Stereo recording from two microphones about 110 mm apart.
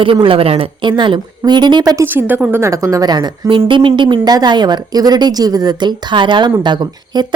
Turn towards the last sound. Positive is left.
turn(degrees=-40)  # may be behind; listen again after turning